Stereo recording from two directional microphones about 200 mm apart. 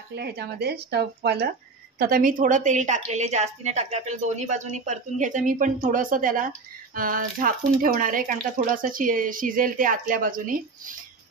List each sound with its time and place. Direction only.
0.1 s a woman's voice: 55° right (ahead or behind)